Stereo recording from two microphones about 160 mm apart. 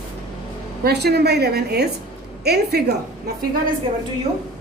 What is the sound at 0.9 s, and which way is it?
A woman's voice, 90° right.